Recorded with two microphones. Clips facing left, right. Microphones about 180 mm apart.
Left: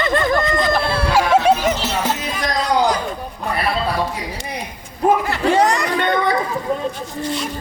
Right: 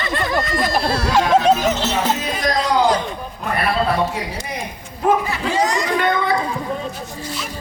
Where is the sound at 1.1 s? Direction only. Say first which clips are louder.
Even; 10° left (ahead or behind).